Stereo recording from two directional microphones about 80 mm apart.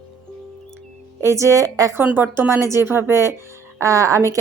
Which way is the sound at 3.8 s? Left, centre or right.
Right.